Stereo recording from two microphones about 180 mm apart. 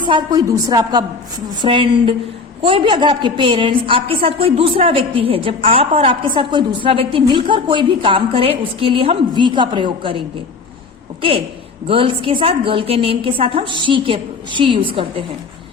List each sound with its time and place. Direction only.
0.0 s a woman's voice: 25° right (ahead or behind)
11.9 s a woman's voice: 30° right (ahead or behind)